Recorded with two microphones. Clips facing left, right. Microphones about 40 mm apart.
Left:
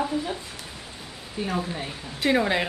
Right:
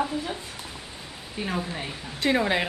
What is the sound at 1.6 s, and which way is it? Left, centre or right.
Speech, centre.